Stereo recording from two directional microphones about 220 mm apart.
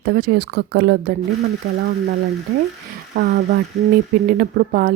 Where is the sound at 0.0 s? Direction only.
45° right (ahead or behind).